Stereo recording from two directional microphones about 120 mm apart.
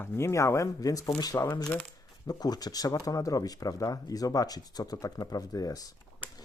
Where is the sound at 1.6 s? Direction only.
10° left (ahead or behind).